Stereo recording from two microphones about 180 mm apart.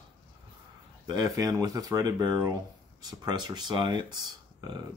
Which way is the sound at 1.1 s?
20° right (ahead or behind).